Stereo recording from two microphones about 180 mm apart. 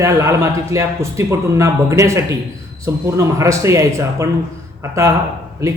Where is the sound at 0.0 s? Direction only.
15° right (ahead or behind).